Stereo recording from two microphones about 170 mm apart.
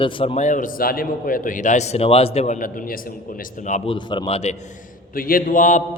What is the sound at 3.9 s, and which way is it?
Speech, 30° left (ahead or behind).